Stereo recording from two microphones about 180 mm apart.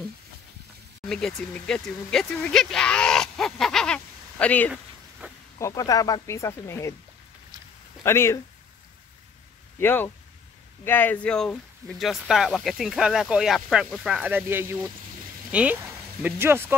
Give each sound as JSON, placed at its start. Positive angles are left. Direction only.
{"t": 1.0, "sound": "speech", "side_deg": 5}
{"t": 5.2, "sound": "a sound", "side_deg": -10}
{"t": 5.6, "sound": "speech", "side_deg": 20}
{"t": 8.0, "sound": "speech", "side_deg": 15}
{"t": 9.8, "sound": "speech", "side_deg": 10}